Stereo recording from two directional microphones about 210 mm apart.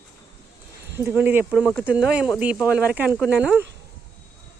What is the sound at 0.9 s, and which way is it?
Speech, 10° right (ahead or behind).